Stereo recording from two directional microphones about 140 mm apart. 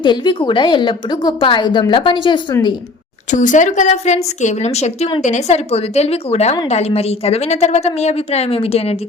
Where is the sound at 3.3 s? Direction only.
60° left (ahead or behind); by 9.0 s 45° left (ahead or behind).